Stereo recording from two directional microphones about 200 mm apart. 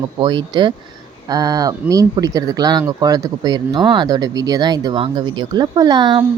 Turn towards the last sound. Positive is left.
turn(degrees=-20)  # may be behind; listen again after turning